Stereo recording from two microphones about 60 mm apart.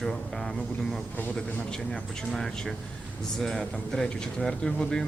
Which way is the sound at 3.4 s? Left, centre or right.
Centre.